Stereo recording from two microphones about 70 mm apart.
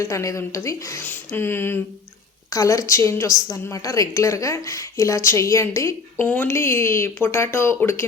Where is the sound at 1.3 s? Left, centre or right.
Left.